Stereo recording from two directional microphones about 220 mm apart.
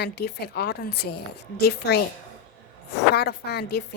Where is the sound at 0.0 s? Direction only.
45° left (ahead or behind).